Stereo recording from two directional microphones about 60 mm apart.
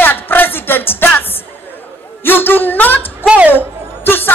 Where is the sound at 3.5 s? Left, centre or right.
Left.